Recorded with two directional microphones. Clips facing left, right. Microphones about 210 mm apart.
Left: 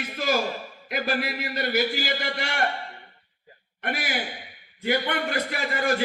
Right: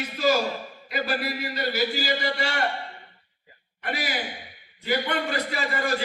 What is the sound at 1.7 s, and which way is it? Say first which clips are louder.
Speech: left 1 dB; 55° left (ahead or behind).